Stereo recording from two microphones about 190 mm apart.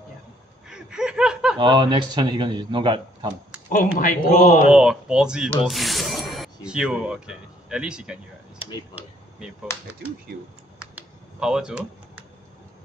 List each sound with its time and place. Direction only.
0.7 s snicker: 5° right (ahead or behind)
1.6 s speech: 25° right (ahead or behind)
3.7 s speech: 45° left (ahead or behind)
4.6 s speech: 5° right (ahead or behind)
8.5 s a sound: 25° left (ahead or behind)
10.3 s speech: 55° right (ahead or behind)
10.8 s finger snapping: 5° right (ahead or behind)